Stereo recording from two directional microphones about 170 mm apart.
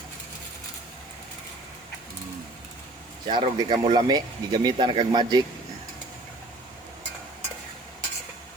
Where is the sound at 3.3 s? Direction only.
30° right (ahead or behind).